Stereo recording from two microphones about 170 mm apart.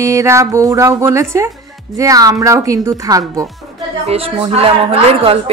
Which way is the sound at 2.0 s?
20° right (ahead or behind).